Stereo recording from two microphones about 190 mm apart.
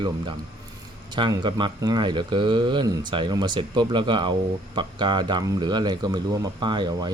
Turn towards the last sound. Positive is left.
turn(degrees=-25)  # may be behind; listen again after turning